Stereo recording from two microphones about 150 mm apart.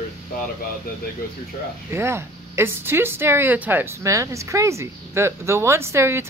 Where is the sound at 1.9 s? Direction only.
15° right (ahead or behind).